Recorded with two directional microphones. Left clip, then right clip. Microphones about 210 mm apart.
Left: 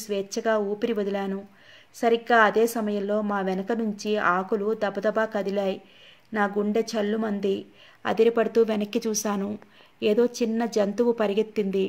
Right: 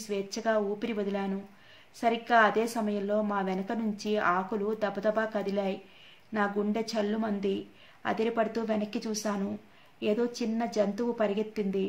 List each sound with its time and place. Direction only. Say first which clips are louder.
0.1 s a woman's voice: left 4 dB; 35° left (ahead or behind)